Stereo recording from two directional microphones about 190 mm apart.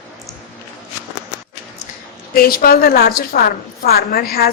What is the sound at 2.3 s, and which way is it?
A woman's voice, 50° left (ahead or behind).